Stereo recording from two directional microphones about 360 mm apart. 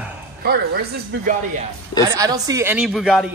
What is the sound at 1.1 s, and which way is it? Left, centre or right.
Speech, right.